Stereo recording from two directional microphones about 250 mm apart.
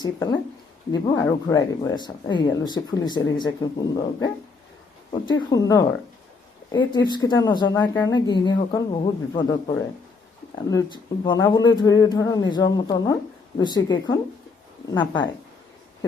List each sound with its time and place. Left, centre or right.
0.0 s speech: centre